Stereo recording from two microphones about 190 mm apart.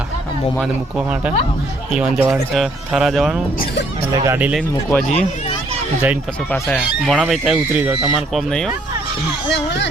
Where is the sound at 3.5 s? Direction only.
45° left (ahead or behind).